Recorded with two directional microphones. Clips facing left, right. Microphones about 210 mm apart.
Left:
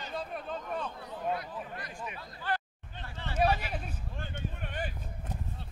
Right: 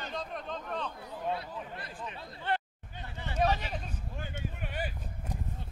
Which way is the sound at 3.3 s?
10° left (ahead or behind).